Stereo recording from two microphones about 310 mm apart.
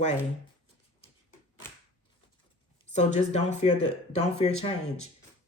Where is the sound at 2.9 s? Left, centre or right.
Left.